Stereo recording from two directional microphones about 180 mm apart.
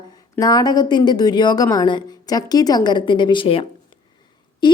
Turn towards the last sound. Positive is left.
turn(degrees=25)  # may be behind; listen again after turning